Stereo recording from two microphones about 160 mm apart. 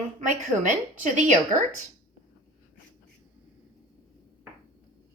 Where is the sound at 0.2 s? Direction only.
55° right (ahead or behind).